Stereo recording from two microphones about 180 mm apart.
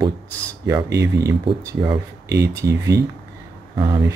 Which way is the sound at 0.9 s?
15° right (ahead or behind).